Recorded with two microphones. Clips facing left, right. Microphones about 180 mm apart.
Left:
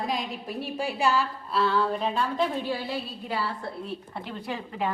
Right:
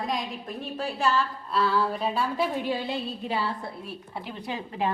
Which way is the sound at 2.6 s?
20° right (ahead or behind).